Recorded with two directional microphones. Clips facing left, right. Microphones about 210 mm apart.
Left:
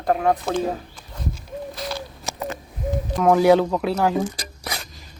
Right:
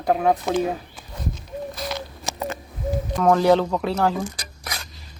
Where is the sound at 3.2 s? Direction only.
10° left (ahead or behind).